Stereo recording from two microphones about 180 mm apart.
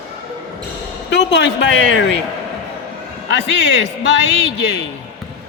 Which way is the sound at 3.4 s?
70° left (ahead or behind).